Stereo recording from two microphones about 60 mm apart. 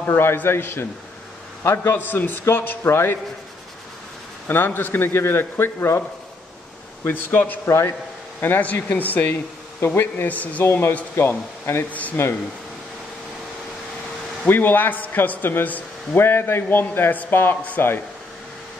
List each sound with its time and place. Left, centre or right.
0.0 s a man's voice: left
4.5 s a man's voice: left
7.1 s a man's voice: left
9.3 s a man's voice: left
10.6 s a man's voice: left
11.9 s speech: left
14.5 s a man's voice: left